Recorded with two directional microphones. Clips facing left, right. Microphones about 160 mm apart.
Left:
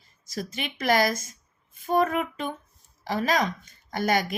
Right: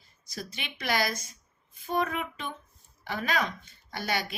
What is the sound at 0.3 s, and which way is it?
A woman's voice, 45° left (ahead or behind).